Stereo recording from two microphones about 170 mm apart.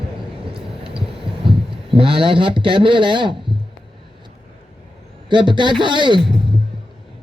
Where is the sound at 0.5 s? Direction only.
30° right (ahead or behind).